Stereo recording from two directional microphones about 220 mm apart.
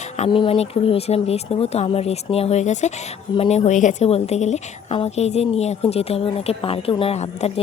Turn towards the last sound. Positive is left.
turn(degrees=30)  # may be behind; listen again after turning